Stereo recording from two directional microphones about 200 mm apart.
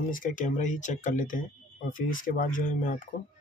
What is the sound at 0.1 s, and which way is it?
Speech, 40° left (ahead or behind).